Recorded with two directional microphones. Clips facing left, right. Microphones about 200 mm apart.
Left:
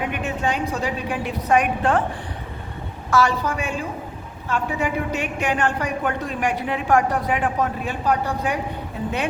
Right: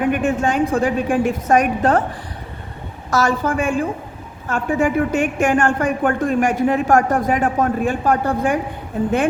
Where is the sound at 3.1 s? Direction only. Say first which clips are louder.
Right 2 dB; 45° right (ahead or behind).